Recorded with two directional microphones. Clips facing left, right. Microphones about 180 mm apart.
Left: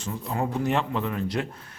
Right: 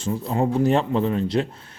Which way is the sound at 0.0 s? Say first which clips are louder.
Right 6 dB; 30° right (ahead or behind).